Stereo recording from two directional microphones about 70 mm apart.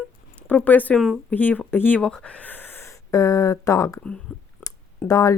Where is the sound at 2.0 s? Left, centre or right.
Centre; by 4.0 s left.